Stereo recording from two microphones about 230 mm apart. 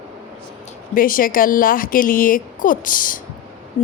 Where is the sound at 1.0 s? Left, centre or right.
Left.